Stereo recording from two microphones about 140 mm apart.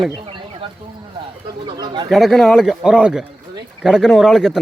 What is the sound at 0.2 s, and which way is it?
Bird, 40° right (ahead or behind).